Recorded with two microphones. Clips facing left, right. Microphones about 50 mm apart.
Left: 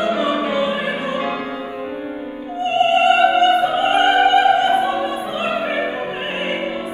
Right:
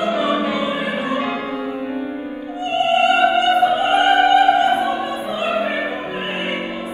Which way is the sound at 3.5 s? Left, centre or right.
Left.